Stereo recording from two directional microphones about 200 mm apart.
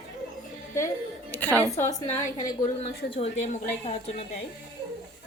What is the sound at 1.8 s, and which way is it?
A woman's voice, 35° left (ahead or behind).